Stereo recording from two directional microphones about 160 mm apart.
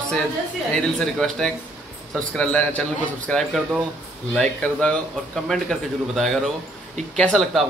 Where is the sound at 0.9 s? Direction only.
5° left (ahead or behind).